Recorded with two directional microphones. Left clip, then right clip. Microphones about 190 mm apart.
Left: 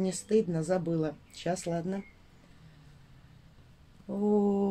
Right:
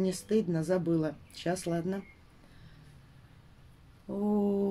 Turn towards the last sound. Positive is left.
turn(degrees=10)  # may be behind; listen again after turning